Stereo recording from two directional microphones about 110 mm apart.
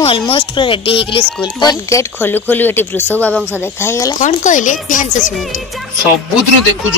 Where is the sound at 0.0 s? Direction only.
60° left (ahead or behind).